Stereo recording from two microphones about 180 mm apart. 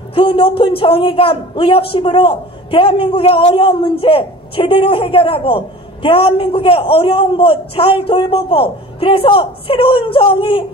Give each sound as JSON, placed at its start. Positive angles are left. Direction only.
{"t": 0.1, "sound": "a man's voice", "side_deg": 30}